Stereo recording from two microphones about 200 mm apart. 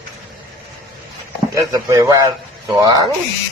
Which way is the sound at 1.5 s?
20° right (ahead or behind).